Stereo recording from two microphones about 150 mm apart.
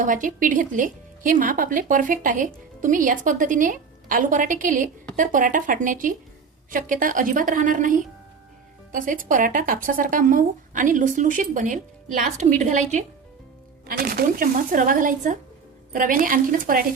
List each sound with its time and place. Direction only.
0.0 s speech: 60° right (ahead or behind)
13.8 s speech: 75° right (ahead or behind)